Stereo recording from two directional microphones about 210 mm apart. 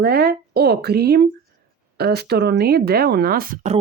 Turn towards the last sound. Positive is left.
turn(degrees=-40)  # may be behind; listen again after turning